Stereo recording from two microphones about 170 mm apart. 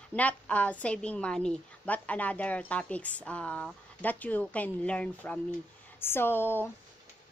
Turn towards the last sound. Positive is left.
turn(degrees=10)  # may be behind; listen again after turning